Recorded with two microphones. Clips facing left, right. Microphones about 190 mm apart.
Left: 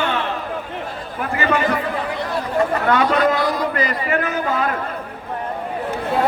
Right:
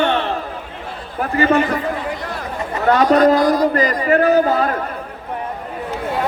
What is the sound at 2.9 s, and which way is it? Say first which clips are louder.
A man's voice: right 7 dB; 40° right (ahead or behind).